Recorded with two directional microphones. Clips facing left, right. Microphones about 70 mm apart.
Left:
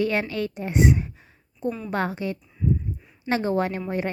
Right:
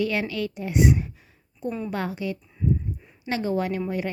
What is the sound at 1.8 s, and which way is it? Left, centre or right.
A woman's voice, left.